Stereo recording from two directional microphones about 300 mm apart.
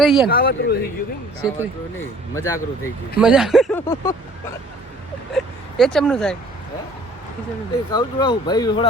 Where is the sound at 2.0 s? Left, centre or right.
Centre.